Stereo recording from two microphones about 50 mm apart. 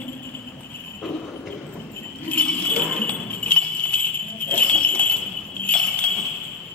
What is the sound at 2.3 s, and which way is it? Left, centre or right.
Jingle bell, left.